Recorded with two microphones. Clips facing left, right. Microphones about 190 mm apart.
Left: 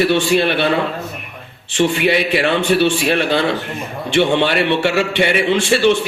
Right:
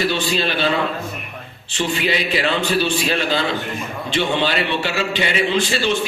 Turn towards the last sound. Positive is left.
turn(degrees=65)  # may be behind; listen again after turning